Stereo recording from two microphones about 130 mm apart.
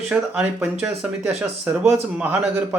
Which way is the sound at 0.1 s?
10° right (ahead or behind).